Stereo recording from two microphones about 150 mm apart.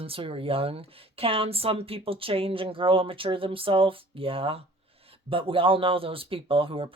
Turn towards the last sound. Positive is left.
turn(degrees=-35)  # may be behind; listen again after turning